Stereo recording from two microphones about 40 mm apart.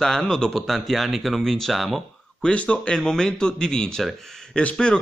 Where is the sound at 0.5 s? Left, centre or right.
Centre.